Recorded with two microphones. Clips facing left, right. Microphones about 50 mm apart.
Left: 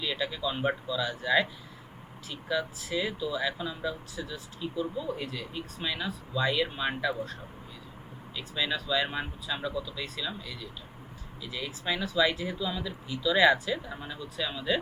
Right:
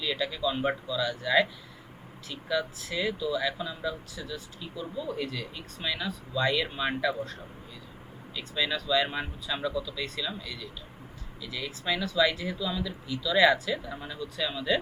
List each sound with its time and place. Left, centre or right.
0.0 s speech: centre
3.1 s speech: centre
4.8 s speech: centre
8.4 s speech: centre
9.7 s speech: centre
10.0 s speech: centre
12.5 s speech: centre